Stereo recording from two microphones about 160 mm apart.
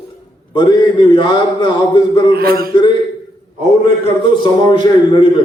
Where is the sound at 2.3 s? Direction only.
70° right (ahead or behind).